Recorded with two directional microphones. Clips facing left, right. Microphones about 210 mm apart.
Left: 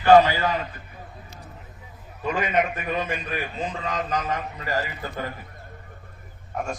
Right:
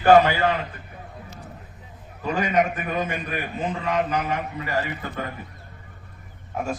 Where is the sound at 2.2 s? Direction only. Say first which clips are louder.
Right 2 dB; 40° right (ahead or behind); by 4.4 s 65° right (ahead or behind).